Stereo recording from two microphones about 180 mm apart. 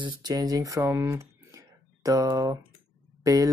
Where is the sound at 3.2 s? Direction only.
20° right (ahead or behind).